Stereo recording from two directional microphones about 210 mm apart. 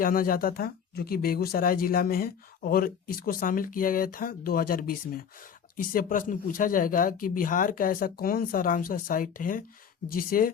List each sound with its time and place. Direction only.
0.0 s speech: 40° left (ahead or behind)